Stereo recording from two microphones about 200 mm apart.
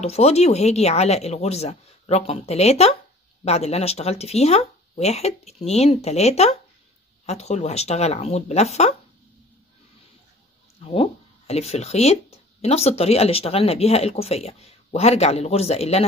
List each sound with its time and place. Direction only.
0.0 s speech: 30° left (ahead or behind)
10.8 s speech: 30° left (ahead or behind)